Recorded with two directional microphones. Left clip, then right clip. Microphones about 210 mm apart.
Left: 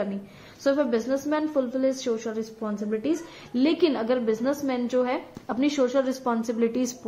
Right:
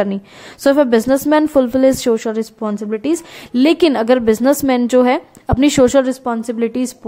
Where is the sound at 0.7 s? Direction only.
55° right (ahead or behind).